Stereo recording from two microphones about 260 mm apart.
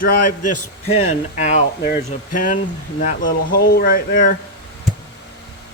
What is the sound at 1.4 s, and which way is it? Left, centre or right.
A man's voice, left.